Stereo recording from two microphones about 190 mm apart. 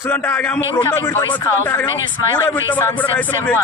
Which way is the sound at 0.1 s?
5° left (ahead or behind).